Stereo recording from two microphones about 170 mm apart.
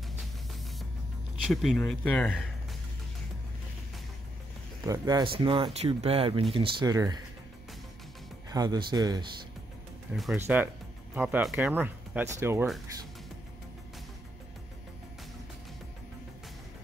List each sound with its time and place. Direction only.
1.5 s speech: centre (ahead or behind)
4.8 s speech: 20° right (ahead or behind)
8.5 s speech: 25° right (ahead or behind)
10.3 s speech: 10° right (ahead or behind)